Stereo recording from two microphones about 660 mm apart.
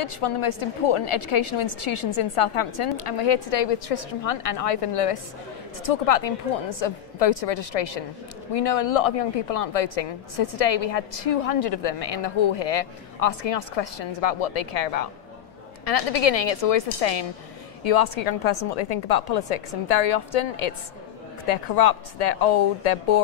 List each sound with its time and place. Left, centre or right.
0.2 s a woman's voice: left